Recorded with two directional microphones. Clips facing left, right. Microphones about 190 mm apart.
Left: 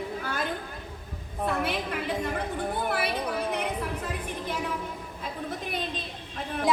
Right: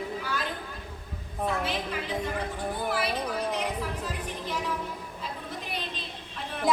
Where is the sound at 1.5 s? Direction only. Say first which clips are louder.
Left 2 dB; 60° left (ahead or behind).